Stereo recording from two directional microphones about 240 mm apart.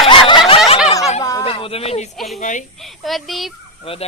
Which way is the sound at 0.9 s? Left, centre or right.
Centre.